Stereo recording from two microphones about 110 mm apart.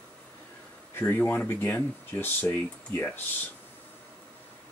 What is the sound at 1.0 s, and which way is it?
Speech, 15° left (ahead or behind).